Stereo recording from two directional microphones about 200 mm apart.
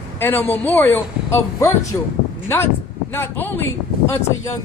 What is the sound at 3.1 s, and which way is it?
Speech, 10° left (ahead or behind).